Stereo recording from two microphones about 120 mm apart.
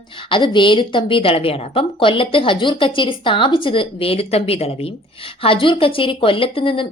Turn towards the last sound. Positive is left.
turn(degrees=50)  # may be behind; listen again after turning